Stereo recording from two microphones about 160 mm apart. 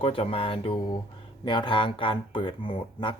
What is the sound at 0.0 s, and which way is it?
Speech, 35° left (ahead or behind).